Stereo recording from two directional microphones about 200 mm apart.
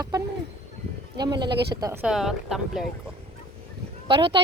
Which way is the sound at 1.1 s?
20° right (ahead or behind).